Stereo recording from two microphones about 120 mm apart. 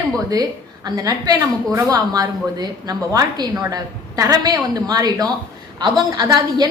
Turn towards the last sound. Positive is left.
turn(degrees=-35)  # may be behind; listen again after turning